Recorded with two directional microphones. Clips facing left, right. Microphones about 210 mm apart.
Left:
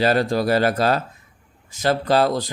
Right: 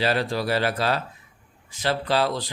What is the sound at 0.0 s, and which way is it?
Speech, 45° left (ahead or behind).